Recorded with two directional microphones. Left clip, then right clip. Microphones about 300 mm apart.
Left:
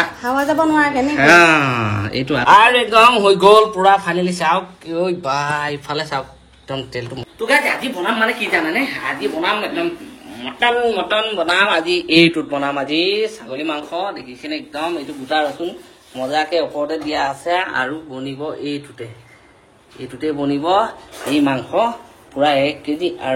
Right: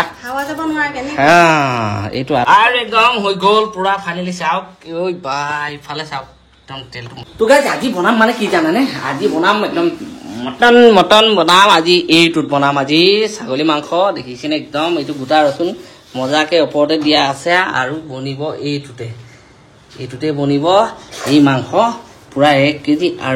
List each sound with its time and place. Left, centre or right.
0.5 s a man's voice: centre
1.1 s speech: right
2.4 s a man's voice: centre
11.1 s speech: centre
20.2 s a man's voice: centre